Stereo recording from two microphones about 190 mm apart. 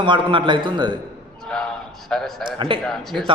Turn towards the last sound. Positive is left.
turn(degrees=0)  # may be behind; listen again after turning